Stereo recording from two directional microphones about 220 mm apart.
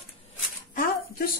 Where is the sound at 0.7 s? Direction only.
40° left (ahead or behind).